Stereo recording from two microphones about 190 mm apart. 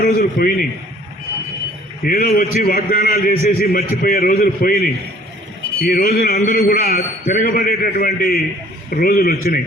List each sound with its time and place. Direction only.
0.0 s a man's voice: 50° left (ahead or behind)
2.0 s a man's voice: 45° left (ahead or behind)